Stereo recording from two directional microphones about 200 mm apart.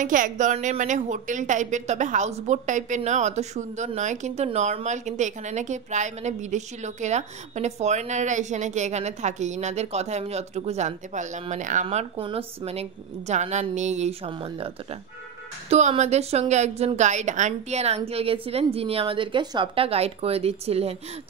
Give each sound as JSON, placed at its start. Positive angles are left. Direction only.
{"t": 0.0, "sound": "a woman's voice", "side_deg": -40}